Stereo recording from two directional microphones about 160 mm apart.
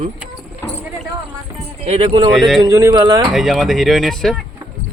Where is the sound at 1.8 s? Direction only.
35° right (ahead or behind).